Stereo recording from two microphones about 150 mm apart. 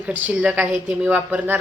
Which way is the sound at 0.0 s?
10° right (ahead or behind).